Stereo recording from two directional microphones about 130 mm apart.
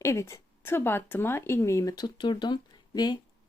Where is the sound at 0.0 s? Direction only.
20° left (ahead or behind).